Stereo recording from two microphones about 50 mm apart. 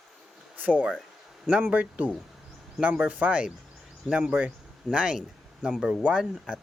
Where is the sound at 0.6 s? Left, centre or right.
Right.